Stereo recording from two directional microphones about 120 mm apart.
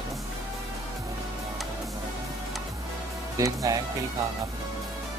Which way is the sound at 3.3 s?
30° right (ahead or behind).